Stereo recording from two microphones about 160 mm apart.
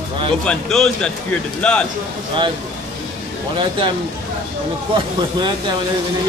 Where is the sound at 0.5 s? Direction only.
5° left (ahead or behind).